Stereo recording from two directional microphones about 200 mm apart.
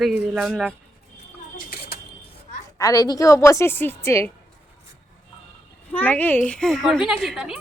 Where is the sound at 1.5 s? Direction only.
45° left (ahead or behind).